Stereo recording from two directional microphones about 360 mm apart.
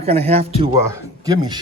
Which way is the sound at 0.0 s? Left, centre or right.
Centre.